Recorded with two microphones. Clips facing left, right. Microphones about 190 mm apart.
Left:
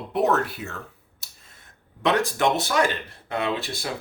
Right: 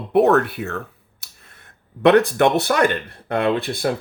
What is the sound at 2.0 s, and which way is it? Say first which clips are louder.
Speech: right 8 dB; 60° right (ahead or behind).